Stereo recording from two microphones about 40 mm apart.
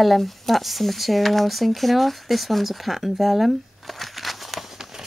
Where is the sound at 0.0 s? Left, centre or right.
Centre.